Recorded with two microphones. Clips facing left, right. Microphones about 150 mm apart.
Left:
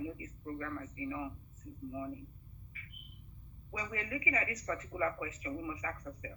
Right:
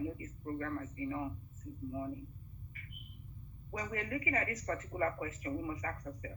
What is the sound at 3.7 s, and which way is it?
Speech, 50° right (ahead or behind).